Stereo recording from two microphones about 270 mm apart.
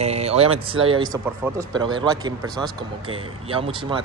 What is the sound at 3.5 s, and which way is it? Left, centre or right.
Speech, centre.